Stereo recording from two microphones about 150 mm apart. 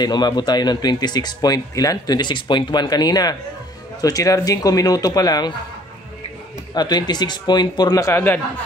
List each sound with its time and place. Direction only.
0.0 s a man's voice: 30° left (ahead or behind)
6.7 s a man's voice: 30° left (ahead or behind)